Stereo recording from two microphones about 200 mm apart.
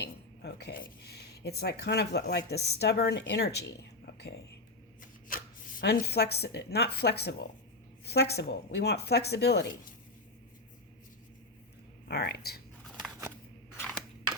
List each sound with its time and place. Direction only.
0.0 s a sound: 55° left (ahead or behind)
2.5 s a woman's voice: 55° left (ahead or behind)
5.8 s speech: 55° left (ahead or behind)
12.0 s speech: 55° left (ahead or behind)